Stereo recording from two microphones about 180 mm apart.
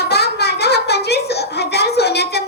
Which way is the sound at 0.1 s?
65° left (ahead or behind).